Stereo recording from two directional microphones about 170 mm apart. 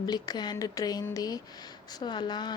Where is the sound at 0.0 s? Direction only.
25° left (ahead or behind).